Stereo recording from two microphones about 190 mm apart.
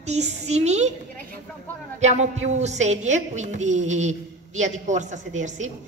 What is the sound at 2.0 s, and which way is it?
A woman's voice, 40° right (ahead or behind).